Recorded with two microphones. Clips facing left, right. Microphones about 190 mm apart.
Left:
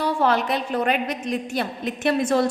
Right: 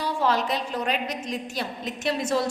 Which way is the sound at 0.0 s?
60° left (ahead or behind).